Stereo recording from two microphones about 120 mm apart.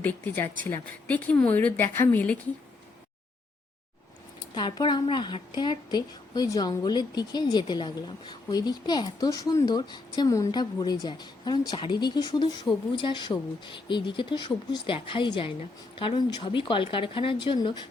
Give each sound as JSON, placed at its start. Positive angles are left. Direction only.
{"t": 0.0, "sound": "speech", "side_deg": 15}
{"t": 4.5, "sound": "a woman's voice", "side_deg": 40}